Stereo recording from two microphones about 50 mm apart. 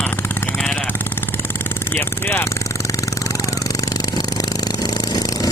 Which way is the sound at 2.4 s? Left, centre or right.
Left.